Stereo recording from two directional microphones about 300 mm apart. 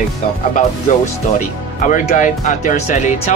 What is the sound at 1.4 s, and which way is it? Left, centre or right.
Speech, left.